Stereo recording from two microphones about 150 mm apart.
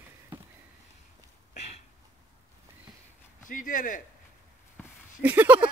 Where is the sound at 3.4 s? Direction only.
60° left (ahead or behind).